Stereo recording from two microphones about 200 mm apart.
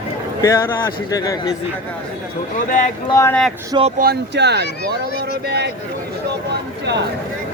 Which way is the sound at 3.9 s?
50° right (ahead or behind).